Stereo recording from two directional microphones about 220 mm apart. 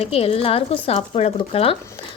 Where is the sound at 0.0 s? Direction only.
25° left (ahead or behind).